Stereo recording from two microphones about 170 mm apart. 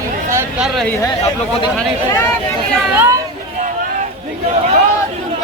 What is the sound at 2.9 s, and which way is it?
Speech, 15° right (ahead or behind).